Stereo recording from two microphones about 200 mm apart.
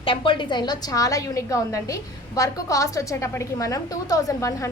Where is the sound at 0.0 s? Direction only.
25° left (ahead or behind).